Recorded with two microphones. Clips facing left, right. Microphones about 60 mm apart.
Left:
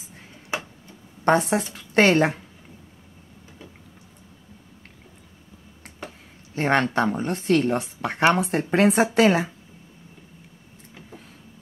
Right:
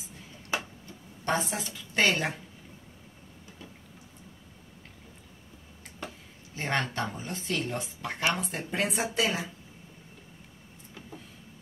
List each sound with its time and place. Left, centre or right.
1.2 s a woman's voice: left
6.5 s speech: left